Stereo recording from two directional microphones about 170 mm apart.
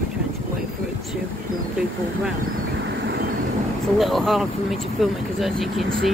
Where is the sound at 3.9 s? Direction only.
Centre (ahead or behind).